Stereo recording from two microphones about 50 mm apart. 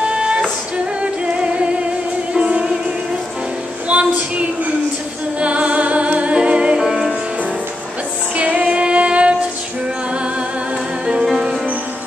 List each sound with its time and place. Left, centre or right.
0.1 s music: centre
2.3 s music: centre
3.9 s a sound: right
5.4 s music: right
8.4 s music: right
11.2 s music: centre